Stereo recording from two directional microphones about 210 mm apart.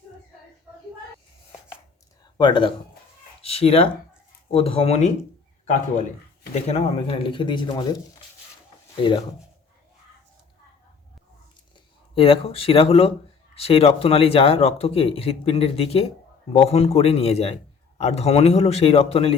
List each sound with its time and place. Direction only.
2.4 s speech: 25° left (ahead or behind)
6.5 s speech: 30° left (ahead or behind)
9.0 s speech: 25° left (ahead or behind)
12.1 s speech: 25° left (ahead or behind)